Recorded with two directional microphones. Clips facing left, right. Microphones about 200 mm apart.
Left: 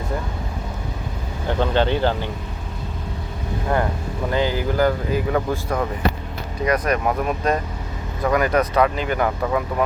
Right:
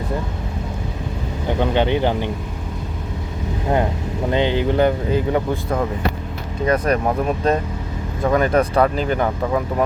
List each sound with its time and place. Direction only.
1.5 s speech: 15° right (ahead or behind)
4.3 s speech: 20° right (ahead or behind)